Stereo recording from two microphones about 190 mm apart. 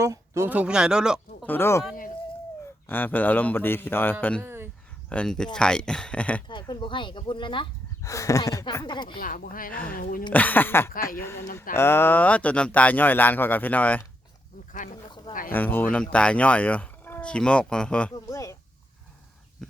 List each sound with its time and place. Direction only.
0.0 s speech: 15° right (ahead or behind)
1.5 s speech: 10° left (ahead or behind)
2.8 s speech: 10° left (ahead or behind)
4.4 s a sound: 10° right (ahead or behind)
5.0 s speech: 5° left (ahead or behind)
6.5 s speech: 25° left (ahead or behind)
9.2 s speech: 50° left (ahead or behind)
10.3 s speech: 10° left (ahead or behind)
15.3 s speech: 45° left (ahead or behind)
15.5 s speech: 10° left (ahead or behind)
18.3 s a sound: 15° left (ahead or behind)